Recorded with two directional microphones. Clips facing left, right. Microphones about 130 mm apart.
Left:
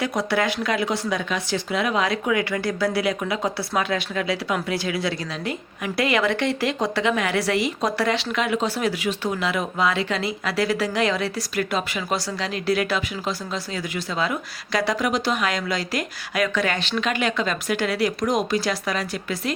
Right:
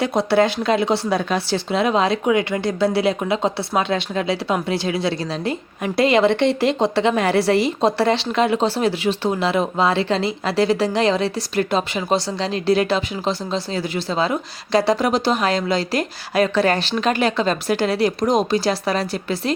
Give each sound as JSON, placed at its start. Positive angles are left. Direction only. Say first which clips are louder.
{"t": 0.0, "sound": "speech", "louder": "right 6 dB", "side_deg": -25}